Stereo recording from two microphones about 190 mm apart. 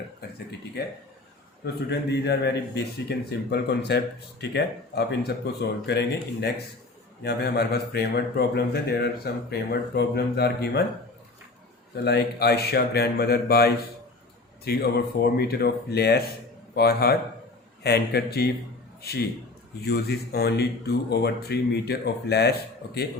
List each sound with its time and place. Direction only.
1.6 s a man's voice: 60° left (ahead or behind)
12.0 s a man's voice: 60° left (ahead or behind)
19.8 s a man's voice: 55° left (ahead or behind)